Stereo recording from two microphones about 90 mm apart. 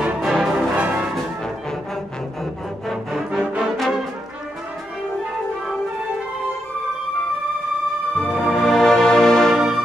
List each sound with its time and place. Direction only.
0.0 s music: 5° right (ahead or behind)
2.9 s music: 5° right (ahead or behind)
3.7 s brass instrument: centre (ahead or behind)
8.2 s music: 5° right (ahead or behind)
8.6 s music: 5° left (ahead or behind)